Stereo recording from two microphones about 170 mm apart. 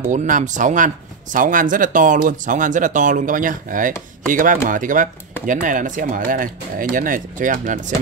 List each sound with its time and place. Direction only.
0.1 s speech: 45° right (ahead or behind)